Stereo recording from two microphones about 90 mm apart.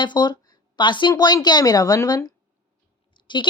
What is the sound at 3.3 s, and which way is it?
Speech, 60° left (ahead or behind).